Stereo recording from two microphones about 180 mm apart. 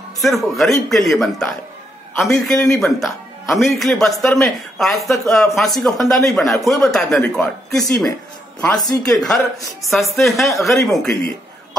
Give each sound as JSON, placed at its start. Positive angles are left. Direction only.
{"t": 0.2, "sound": "a man's voice", "side_deg": 0}
{"t": 8.7, "sound": "speech", "side_deg": 20}
{"t": 9.8, "sound": "a man's voice", "side_deg": 0}